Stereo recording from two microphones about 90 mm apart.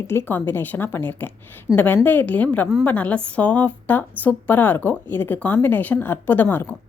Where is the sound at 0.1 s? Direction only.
25° left (ahead or behind).